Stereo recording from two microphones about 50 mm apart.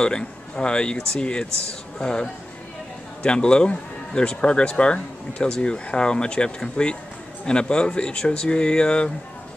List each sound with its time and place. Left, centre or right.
0.0 s speech: centre